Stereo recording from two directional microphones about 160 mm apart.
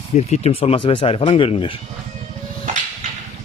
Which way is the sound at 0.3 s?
40° left (ahead or behind).